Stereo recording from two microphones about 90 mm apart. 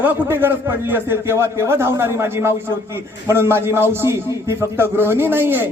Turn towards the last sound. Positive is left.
turn(degrees=-25)  # may be behind; listen again after turning